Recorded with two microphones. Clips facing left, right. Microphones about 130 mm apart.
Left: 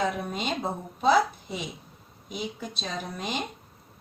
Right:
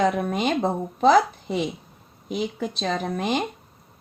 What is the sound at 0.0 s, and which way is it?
A woman's voice, 60° right (ahead or behind).